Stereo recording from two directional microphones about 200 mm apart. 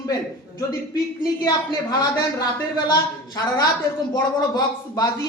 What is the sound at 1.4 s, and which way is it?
Speech, 20° left (ahead or behind).